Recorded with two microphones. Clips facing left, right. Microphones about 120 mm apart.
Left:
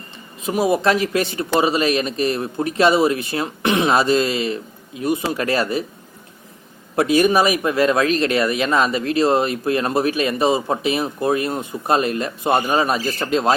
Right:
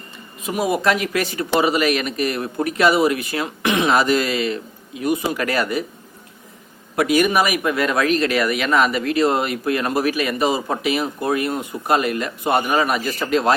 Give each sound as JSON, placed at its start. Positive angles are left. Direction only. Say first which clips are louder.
{"t": 0.4, "sound": "speech", "louder": "left 2 dB", "side_deg": 30}
{"t": 6.9, "sound": "speech", "louder": "left 1 dB", "side_deg": 30}